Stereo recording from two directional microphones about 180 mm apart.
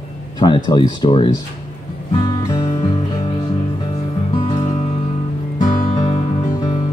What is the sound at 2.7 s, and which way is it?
Music, 25° left (ahead or behind).